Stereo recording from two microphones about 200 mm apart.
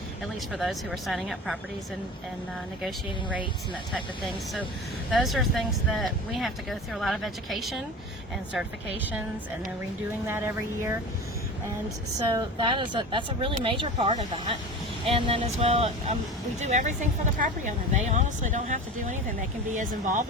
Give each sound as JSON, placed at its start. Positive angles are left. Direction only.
{"t": 0.5, "sound": "speech", "side_deg": 0}
{"t": 2.8, "sound": "speech", "side_deg": 0}
{"t": 5.1, "sound": "speech", "side_deg": 0}
{"t": 10.2, "sound": "speech", "side_deg": -10}
{"t": 12.3, "sound": "speech", "side_deg": -20}